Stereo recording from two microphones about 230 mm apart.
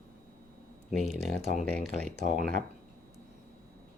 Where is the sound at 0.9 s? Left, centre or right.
Centre.